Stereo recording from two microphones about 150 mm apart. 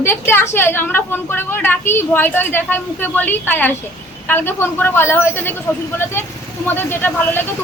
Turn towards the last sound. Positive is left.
turn(degrees=15)  # may be behind; listen again after turning